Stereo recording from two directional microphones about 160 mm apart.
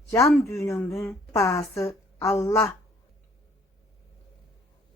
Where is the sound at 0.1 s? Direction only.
15° left (ahead or behind).